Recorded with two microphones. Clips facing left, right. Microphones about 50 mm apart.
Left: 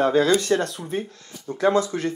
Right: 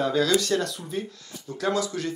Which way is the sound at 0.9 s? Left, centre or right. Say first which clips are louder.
Left 3 dB; left.